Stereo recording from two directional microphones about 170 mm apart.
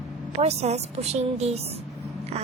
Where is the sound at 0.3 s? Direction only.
40° right (ahead or behind).